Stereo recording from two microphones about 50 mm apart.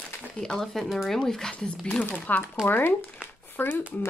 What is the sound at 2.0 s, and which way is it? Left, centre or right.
Speech, left.